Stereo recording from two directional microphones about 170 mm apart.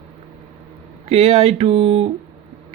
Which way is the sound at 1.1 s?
35° right (ahead or behind).